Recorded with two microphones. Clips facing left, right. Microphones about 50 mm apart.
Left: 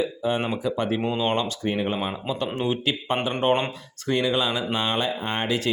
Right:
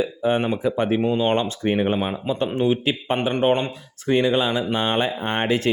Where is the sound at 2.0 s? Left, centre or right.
Centre.